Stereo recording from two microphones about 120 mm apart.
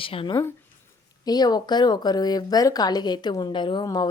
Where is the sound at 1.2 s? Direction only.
35° left (ahead or behind).